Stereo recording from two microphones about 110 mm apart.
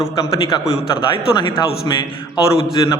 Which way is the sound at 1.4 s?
50° left (ahead or behind).